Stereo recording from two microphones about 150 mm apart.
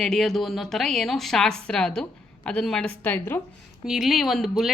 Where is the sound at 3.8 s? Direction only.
Centre (ahead or behind).